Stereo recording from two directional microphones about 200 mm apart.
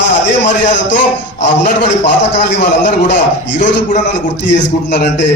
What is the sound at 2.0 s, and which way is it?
A man's voice, 60° left (ahead or behind).